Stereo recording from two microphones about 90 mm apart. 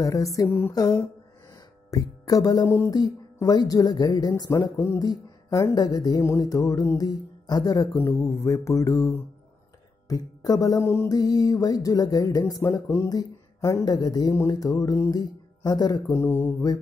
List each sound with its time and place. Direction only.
0.0 s speech: 40° left (ahead or behind)
0.5 s a sound: 25° left (ahead or behind)
0.7 s speech: 50° left (ahead or behind)
8.2 s speech: 35° left (ahead or behind)
10.0 s speech: 45° left (ahead or behind); by 11.1 s 30° left (ahead or behind)
11.1 s speech: 45° left (ahead or behind)
13.8 s speech: 50° left (ahead or behind); by 16.5 s 30° left (ahead or behind)